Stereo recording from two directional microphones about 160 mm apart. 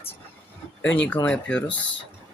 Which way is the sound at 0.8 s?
10° left (ahead or behind).